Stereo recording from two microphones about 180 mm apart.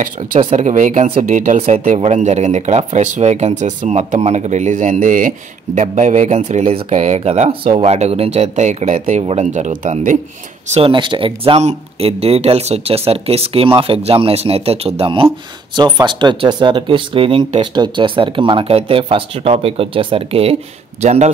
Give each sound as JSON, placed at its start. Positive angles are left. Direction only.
{"t": 0.4, "sound": "speech", "side_deg": -35}
{"t": 10.7, "sound": "speech", "side_deg": -30}